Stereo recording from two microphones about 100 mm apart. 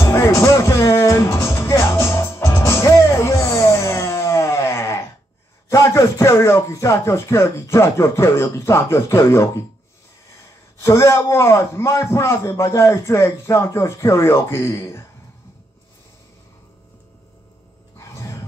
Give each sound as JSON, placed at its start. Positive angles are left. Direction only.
{"t": 0.0, "sound": "music", "side_deg": 25}
{"t": 5.7, "sound": "a man's voice", "side_deg": 30}
{"t": 10.8, "sound": "a man's voice", "side_deg": 25}
{"t": 17.9, "sound": "a sound", "side_deg": 30}